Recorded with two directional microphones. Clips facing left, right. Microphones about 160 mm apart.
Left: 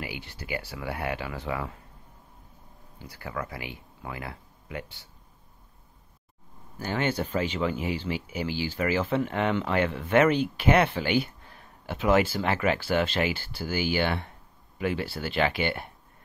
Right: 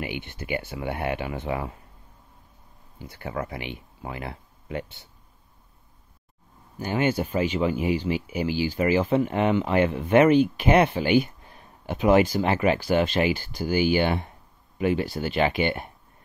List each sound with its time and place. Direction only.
0.0 s speech: 20° right (ahead or behind)
3.1 s speech: 25° right (ahead or behind)
6.8 s speech: 15° right (ahead or behind)